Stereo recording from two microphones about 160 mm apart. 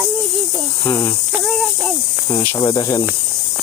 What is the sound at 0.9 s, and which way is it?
Speech, 15° left (ahead or behind).